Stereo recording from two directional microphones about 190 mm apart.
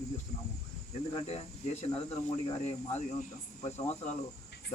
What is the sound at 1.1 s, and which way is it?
Speech, 30° left (ahead or behind).